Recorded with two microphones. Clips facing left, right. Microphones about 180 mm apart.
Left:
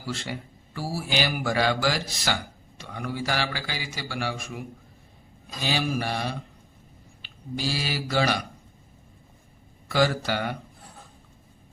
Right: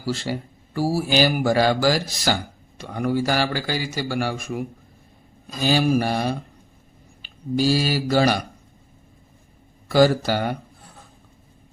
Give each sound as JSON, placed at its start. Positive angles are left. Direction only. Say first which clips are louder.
{"t": 0.0, "sound": "a man's voice", "louder": "right 7 dB", "side_deg": -35}
{"t": 5.6, "sound": "mantra", "louder": "right 8 dB", "side_deg": -45}
{"t": 7.2, "sound": "speech", "louder": "right 10 dB", "side_deg": -40}
{"t": 9.9, "sound": "a man's voice", "louder": "right 7 dB", "side_deg": -40}